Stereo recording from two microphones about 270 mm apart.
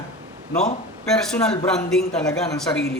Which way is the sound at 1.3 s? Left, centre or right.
Centre.